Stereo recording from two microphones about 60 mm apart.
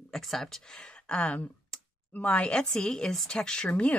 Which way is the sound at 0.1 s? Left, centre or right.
Centre.